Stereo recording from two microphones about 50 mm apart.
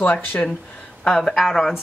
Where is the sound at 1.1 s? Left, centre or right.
Centre.